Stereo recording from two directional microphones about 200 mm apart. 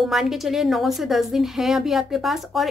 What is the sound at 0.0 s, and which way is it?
A woman's voice, centre (ahead or behind).